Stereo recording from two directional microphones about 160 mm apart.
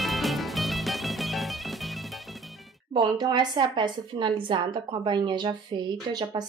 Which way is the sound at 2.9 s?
30° right (ahead or behind).